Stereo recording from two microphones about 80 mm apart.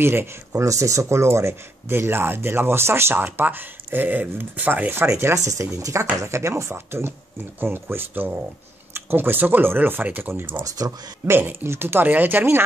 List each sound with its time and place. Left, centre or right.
0.0 s speech: right
0.6 s speech: right
10.8 s speech: right
11.2 s speech: right